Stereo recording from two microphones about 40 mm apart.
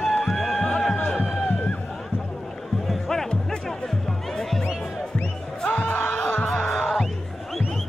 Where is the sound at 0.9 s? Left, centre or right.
Left.